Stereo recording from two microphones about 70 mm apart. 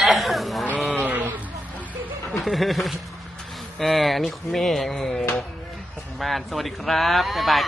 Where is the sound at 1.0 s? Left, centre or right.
Right.